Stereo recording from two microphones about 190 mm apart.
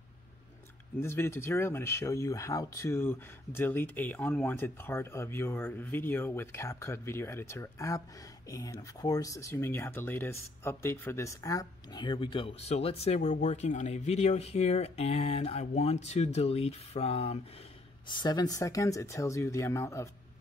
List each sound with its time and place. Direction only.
0.9 s speech: 15° left (ahead or behind); by 17.4 s 30° left (ahead or behind)
18.0 s speech: 20° left (ahead or behind)